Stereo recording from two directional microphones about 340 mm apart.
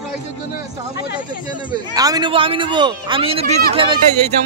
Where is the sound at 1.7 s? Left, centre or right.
Centre.